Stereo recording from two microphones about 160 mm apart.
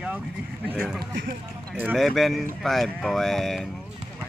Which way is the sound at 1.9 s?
Centre (ahead or behind).